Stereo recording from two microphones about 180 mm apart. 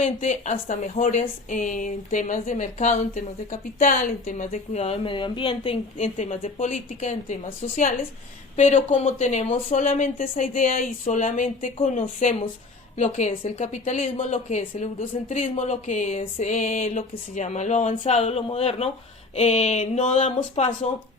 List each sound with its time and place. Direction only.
0.0 s a woman's voice: 40° left (ahead or behind)
8.5 s a woman's voice: 40° left (ahead or behind)